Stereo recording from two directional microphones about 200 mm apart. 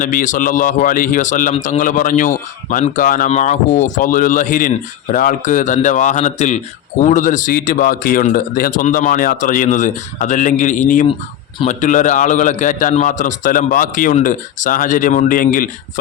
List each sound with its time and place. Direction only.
0.0 s a man's voice: 40° left (ahead or behind)